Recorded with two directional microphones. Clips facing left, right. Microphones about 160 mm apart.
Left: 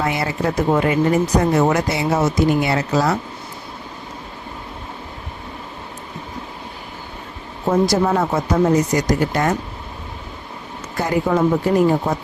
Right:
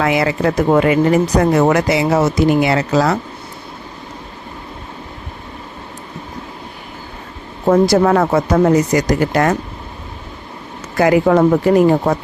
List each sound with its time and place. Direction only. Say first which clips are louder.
0.0 s speech: right 5 dB; 90° right
7.7 s speech: right 5 dB; 70° right (ahead or behind)
10.9 s speech: right 7 dB; 90° right; by 12.1 s 70° right (ahead or behind)